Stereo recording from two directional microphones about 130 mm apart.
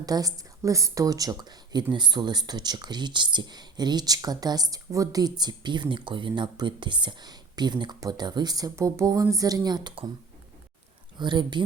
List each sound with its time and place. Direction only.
0.0 s a woman's voice: 30° right (ahead or behind)
11.2 s a woman's voice: 35° right (ahead or behind)